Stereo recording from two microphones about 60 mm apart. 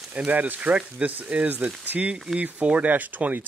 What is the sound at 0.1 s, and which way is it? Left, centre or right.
Speech, right.